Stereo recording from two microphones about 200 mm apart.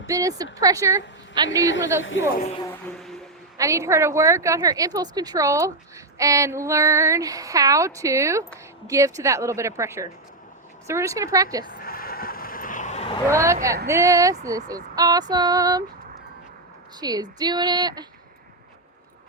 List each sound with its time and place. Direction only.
0.1 s female singing: 15° right (ahead or behind)
2.0 s speech: 75° left (ahead or behind)
2.9 s music: centre (ahead or behind)
3.6 s female singing: 15° right (ahead or behind)
11.6 s vehicle: 45° left (ahead or behind)
13.2 s female singing: 15° right (ahead or behind)
14.9 s speech: 20° right (ahead or behind)
17.0 s speech: 20° right (ahead or behind)